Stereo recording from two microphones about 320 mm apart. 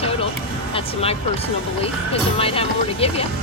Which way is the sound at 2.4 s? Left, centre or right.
Centre.